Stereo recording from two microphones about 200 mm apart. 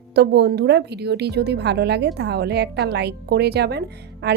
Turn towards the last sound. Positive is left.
turn(degrees=-55)  # may be behind; listen again after turning